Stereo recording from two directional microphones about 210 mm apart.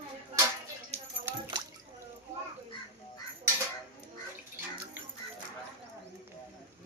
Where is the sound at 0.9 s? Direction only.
30° right (ahead or behind).